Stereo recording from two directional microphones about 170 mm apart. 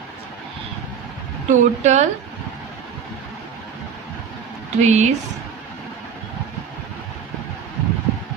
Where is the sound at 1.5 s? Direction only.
45° right (ahead or behind).